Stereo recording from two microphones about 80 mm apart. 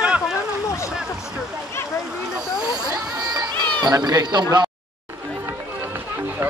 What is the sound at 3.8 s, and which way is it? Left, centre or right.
Speech, right.